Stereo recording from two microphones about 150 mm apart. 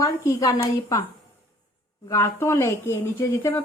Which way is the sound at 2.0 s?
20° left (ahead or behind).